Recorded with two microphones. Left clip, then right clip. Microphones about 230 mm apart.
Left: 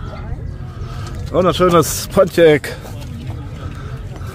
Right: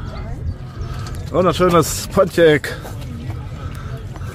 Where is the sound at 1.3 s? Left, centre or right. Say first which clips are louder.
Left 2 dB; centre.